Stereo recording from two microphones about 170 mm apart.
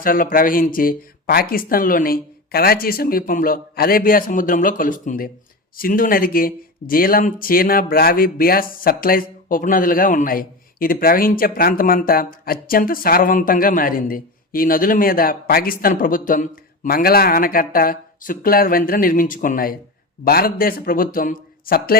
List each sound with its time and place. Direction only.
0.0 s speech: 55° left (ahead or behind)